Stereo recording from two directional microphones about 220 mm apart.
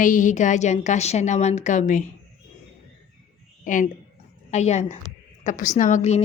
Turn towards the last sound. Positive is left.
turn(degrees=30)  # may be behind; listen again after turning